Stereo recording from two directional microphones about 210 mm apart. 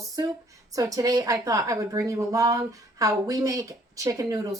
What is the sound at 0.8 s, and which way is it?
A woman's voice, 15° right (ahead or behind).